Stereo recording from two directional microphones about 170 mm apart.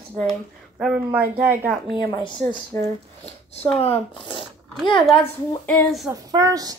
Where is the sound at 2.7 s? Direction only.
15° left (ahead or behind).